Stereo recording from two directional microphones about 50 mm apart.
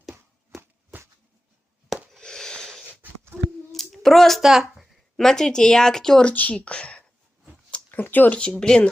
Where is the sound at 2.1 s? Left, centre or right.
Centre.